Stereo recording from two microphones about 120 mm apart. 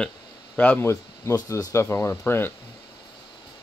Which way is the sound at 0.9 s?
25° left (ahead or behind).